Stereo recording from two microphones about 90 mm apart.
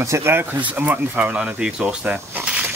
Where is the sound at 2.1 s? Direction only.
15° right (ahead or behind).